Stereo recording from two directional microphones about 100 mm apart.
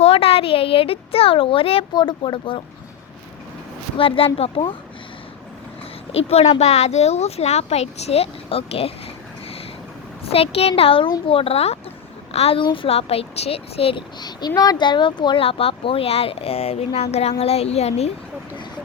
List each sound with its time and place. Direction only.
0.0 s a child's voice: 75° left (ahead or behind)
1.9 s speech: 50° left (ahead or behind)
3.9 s a child's voice: 65° left (ahead or behind)
6.1 s speech: 85° left
10.2 s a child's voice: 75° left (ahead or behind)
14.2 s speech: 45° left (ahead or behind)
15.4 s speech: 70° left (ahead or behind); by 18.1 s 90° left